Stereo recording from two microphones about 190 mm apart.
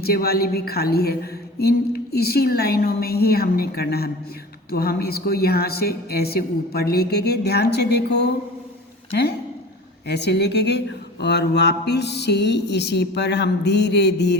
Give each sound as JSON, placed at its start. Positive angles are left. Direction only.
{"t": 0.0, "sound": "speech", "side_deg": 55}
{"t": 10.1, "sound": "speech", "side_deg": 60}